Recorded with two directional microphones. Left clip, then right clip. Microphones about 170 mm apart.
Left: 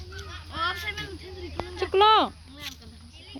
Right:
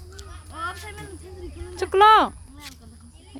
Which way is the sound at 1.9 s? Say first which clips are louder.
Right 5 dB; 15° right (ahead or behind).